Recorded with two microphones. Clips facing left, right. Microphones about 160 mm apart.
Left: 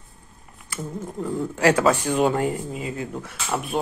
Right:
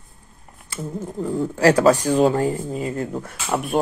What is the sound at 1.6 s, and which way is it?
Speech, 35° right (ahead or behind).